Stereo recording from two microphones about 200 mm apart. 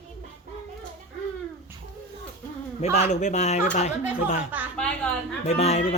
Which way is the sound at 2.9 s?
35° left (ahead or behind).